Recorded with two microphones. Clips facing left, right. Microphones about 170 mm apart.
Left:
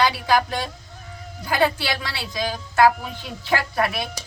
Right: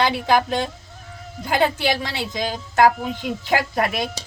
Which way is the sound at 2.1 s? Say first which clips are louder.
Right 2 dB; 20° right (ahead or behind).